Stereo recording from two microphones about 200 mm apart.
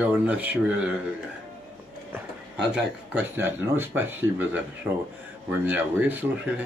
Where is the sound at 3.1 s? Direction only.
10° right (ahead or behind).